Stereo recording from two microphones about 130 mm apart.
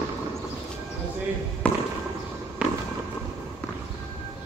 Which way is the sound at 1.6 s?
10° left (ahead or behind).